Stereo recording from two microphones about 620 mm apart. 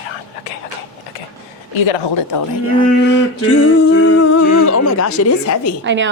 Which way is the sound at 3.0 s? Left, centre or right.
Centre.